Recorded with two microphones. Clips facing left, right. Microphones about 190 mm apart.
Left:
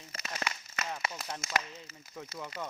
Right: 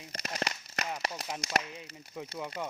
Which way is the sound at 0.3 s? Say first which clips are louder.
Right 2 dB; 35° right (ahead or behind).